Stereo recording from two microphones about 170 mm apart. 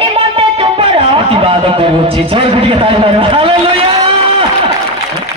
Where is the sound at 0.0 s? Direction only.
35° right (ahead or behind).